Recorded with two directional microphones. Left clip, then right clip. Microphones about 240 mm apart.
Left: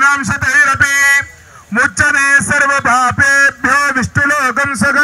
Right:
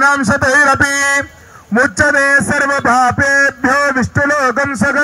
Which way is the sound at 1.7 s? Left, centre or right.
Right.